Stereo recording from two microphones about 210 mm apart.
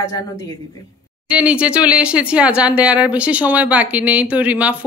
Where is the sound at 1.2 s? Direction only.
5° right (ahead or behind).